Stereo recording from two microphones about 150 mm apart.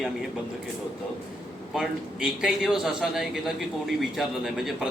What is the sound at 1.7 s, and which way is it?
A man's voice, 5° right (ahead or behind).